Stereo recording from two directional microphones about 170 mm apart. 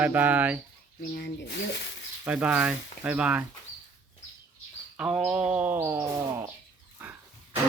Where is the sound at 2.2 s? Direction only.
5° right (ahead or behind).